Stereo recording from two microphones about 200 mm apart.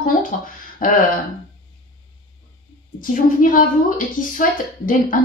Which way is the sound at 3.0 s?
40° left (ahead or behind).